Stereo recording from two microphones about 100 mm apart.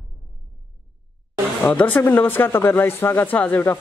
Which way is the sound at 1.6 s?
15° left (ahead or behind).